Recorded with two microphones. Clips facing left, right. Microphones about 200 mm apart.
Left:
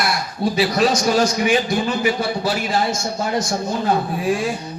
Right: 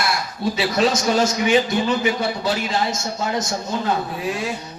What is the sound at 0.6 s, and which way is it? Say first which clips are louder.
A man's voice: left 2 dB; 25° right (ahead or behind).